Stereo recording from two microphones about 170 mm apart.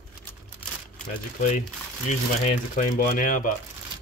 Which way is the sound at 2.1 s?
45° left (ahead or behind).